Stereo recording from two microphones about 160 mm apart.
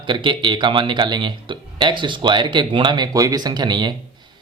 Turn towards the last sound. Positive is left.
turn(degrees=-30)  # may be behind; listen again after turning